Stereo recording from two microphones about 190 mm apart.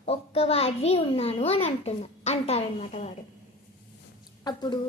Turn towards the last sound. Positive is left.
turn(degrees=20)  # may be behind; listen again after turning